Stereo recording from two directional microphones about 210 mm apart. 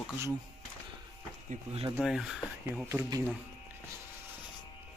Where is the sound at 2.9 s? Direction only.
15° right (ahead or behind).